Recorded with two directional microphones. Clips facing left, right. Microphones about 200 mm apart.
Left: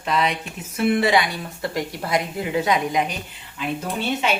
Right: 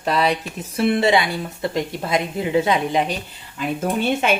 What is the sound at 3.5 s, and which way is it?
Speech, 50° right (ahead or behind).